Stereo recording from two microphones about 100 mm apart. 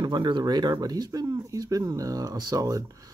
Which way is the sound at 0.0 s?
50° right (ahead or behind).